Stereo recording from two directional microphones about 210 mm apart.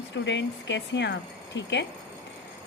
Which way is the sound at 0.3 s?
60° left (ahead or behind).